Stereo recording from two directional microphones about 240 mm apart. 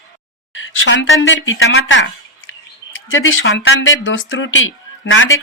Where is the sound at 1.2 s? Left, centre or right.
Left.